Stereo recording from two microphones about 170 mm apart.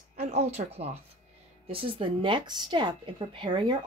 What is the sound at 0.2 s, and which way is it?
Speech, 40° right (ahead or behind).